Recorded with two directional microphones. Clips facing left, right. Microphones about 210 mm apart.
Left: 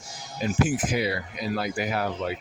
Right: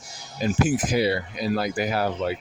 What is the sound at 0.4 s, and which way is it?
Speech, 35° right (ahead or behind).